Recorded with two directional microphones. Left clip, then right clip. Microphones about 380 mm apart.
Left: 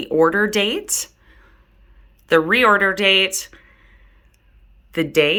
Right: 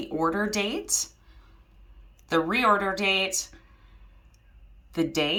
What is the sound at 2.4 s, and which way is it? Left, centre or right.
Speech, centre.